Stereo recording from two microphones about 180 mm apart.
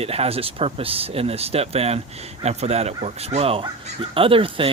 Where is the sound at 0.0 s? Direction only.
35° right (ahead or behind).